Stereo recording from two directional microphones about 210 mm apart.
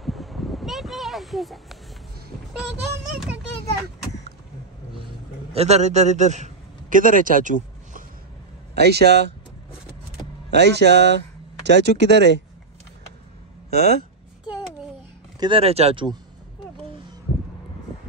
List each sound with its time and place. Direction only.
0.0 s a sound: centre (ahead or behind)
5.5 s a man's voice: 30° right (ahead or behind)
8.7 s speech: 50° right (ahead or behind)
10.5 s speech: 55° right (ahead or behind)
13.7 s speech: 50° right (ahead or behind)
15.4 s speech: 25° right (ahead or behind)